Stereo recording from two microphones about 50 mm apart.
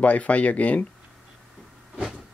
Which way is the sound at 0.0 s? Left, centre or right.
Left.